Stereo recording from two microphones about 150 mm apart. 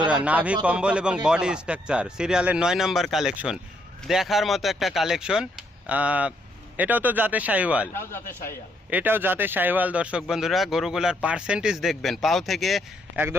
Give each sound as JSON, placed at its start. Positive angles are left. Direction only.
{"t": 0.1, "sound": "a man's voice", "side_deg": -10}
{"t": 7.9, "sound": "speech", "side_deg": 15}
{"t": 8.9, "sound": "a man's voice", "side_deg": -10}